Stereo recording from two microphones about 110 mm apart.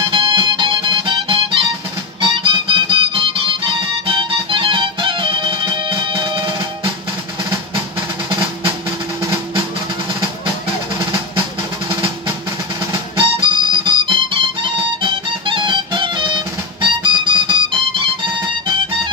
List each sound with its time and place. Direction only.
0.0 s music: 50° right (ahead or behind)
13.2 s music: 50° right (ahead or behind)